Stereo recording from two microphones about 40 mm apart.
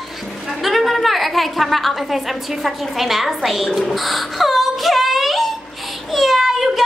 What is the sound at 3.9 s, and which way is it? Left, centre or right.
Wail, centre.